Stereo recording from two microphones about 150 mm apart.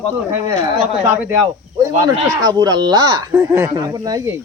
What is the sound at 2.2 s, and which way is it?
Speech, 25° right (ahead or behind).